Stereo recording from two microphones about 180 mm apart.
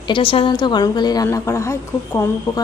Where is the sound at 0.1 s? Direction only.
30° left (ahead or behind).